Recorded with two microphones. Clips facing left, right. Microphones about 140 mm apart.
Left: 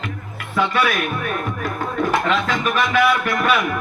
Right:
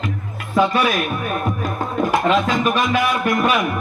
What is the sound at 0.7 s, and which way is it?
Speech, 15° right (ahead or behind).